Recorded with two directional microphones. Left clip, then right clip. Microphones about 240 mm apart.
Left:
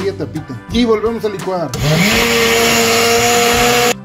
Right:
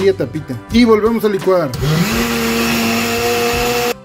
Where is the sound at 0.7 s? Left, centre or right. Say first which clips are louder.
Right 2 dB; right.